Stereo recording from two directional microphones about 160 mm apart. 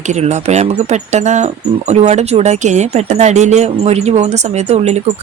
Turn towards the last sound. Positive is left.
turn(degrees=-45)  # may be behind; listen again after turning